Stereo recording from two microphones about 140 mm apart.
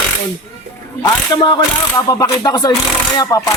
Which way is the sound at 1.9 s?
25° left (ahead or behind).